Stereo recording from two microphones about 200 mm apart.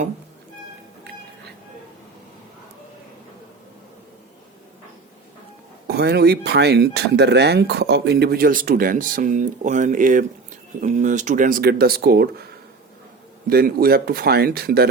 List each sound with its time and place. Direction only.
5.9 s speech: 55° right (ahead or behind)
13.5 s speech: 50° right (ahead or behind)